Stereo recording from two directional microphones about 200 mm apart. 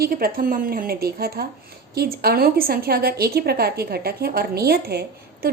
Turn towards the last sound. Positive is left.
turn(degrees=-50)  # may be behind; listen again after turning